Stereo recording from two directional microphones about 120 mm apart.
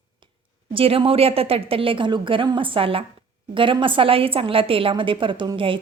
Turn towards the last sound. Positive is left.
turn(degrees=-45)  # may be behind; listen again after turning